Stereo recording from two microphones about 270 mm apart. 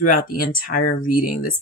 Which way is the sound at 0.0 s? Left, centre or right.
Left.